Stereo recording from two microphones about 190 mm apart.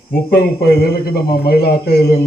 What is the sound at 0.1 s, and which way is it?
A man's voice, 55° left (ahead or behind).